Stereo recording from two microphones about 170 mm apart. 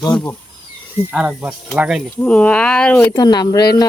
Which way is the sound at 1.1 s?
10° right (ahead or behind).